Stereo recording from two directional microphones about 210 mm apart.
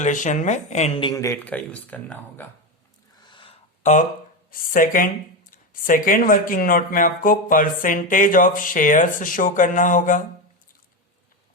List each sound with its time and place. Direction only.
0.0 s speech: 35° left (ahead or behind); by 2.5 s 10° left (ahead or behind)
3.2 s gasp: 20° left (ahead or behind)
4.7 s speech: 40° left (ahead or behind)